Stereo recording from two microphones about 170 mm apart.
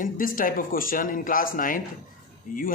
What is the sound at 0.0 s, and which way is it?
Speech, 55° left (ahead or behind).